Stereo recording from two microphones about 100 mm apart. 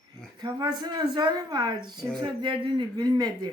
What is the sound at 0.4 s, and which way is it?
Speech, 45° right (ahead or behind).